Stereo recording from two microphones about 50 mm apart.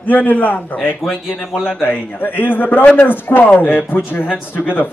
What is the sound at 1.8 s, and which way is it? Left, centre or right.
A man's voice, left.